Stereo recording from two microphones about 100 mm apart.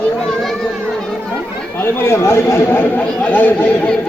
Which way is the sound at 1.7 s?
25° left (ahead or behind).